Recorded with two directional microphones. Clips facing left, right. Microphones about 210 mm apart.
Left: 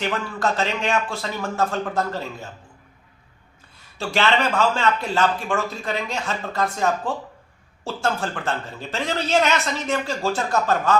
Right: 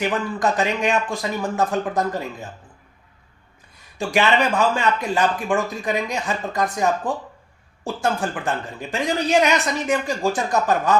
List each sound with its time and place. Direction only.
0.0 s speech: 15° right (ahead or behind)
3.9 s speech: 15° right (ahead or behind)